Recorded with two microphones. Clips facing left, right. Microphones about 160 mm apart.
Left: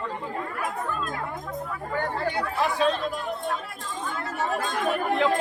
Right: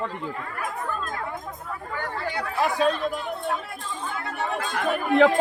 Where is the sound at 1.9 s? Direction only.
50° left (ahead or behind).